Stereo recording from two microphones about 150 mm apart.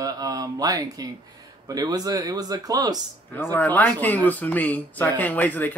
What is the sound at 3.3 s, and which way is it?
Speech, 15° left (ahead or behind).